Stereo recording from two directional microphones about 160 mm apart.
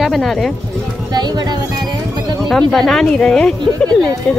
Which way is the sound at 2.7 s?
5° left (ahead or behind).